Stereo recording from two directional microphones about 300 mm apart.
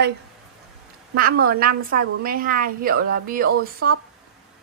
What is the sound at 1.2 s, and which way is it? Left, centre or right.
A woman's voice, right.